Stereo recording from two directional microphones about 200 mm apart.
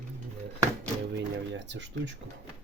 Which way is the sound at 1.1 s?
60° right (ahead or behind).